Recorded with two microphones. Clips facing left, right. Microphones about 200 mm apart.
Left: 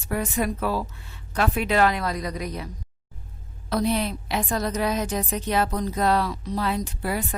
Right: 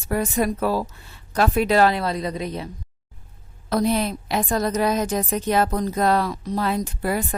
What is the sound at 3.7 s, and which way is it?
A woman's voice, 45° right (ahead or behind).